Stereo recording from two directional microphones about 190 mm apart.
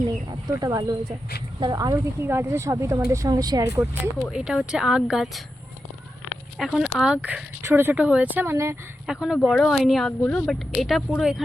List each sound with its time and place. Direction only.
0.3 s a woman's voice: 20° right (ahead or behind)
4.3 s speech: 5° right (ahead or behind)
6.6 s a woman's voice: centre (ahead or behind)
9.0 s speech: 5° right (ahead or behind)